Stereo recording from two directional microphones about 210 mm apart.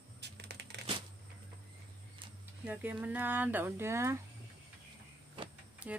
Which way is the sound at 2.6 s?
10° right (ahead or behind).